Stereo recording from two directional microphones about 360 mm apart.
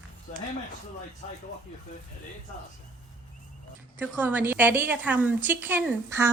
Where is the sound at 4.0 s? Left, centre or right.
Centre.